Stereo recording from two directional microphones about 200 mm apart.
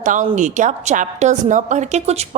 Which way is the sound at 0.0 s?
40° right (ahead or behind).